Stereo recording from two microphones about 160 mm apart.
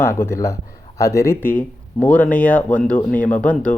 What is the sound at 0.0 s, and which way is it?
Speech, 15° left (ahead or behind).